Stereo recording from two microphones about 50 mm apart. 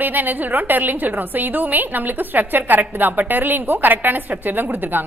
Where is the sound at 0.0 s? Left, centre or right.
Right.